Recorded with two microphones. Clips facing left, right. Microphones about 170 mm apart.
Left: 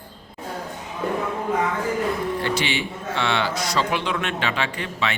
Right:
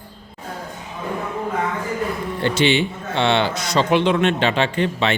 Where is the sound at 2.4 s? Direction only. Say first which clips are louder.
Right 6 dB; 25° right (ahead or behind).